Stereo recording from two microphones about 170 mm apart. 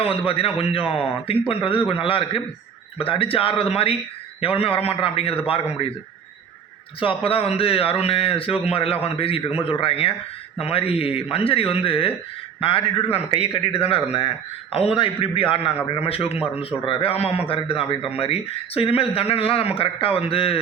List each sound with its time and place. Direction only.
0.1 s speech: 35° left (ahead or behind)
7.0 s speech: 30° left (ahead or behind)